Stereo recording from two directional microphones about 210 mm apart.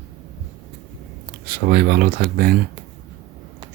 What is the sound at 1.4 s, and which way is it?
Speech, 45° right (ahead or behind).